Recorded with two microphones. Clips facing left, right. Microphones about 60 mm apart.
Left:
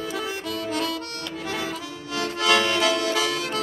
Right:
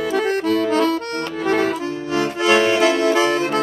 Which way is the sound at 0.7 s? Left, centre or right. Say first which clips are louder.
Right 6 dB; right.